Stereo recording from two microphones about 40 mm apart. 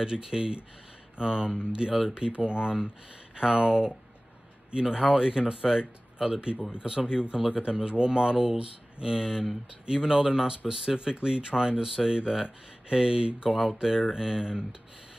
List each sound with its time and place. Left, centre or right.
0.0 s speech: centre
3.4 s speech: centre